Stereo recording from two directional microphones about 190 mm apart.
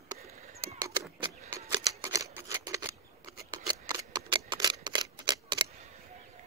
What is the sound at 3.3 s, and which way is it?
Scissors, 20° right (ahead or behind).